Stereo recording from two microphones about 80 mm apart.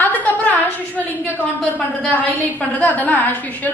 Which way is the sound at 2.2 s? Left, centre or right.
Left.